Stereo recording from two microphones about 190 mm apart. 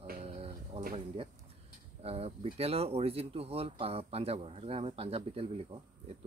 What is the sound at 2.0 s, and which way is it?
Speech, 30° right (ahead or behind).